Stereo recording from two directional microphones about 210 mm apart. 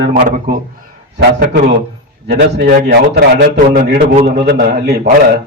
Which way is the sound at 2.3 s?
50° right (ahead or behind).